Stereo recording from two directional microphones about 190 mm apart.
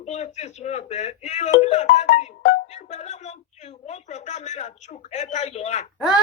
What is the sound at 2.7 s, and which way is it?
Music, 35° left (ahead or behind).